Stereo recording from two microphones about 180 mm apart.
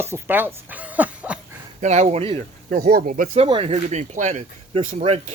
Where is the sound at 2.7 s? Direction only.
55° right (ahead or behind).